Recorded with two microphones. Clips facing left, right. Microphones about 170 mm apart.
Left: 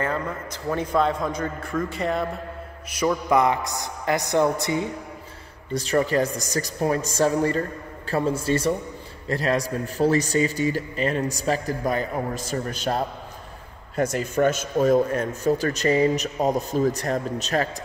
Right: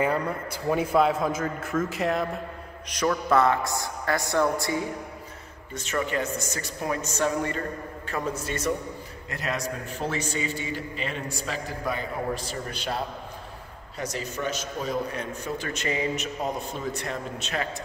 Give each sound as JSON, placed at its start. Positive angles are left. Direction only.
{"t": 0.0, "sound": "a man's voice", "side_deg": -10}
{"t": 2.9, "sound": "a woman's voice", "side_deg": 10}
{"t": 5.7, "sound": "a man's voice", "side_deg": 35}